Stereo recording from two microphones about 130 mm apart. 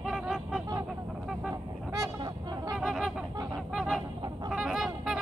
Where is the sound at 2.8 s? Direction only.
5° right (ahead or behind).